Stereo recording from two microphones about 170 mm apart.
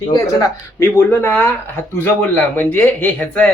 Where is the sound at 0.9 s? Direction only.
10° left (ahead or behind).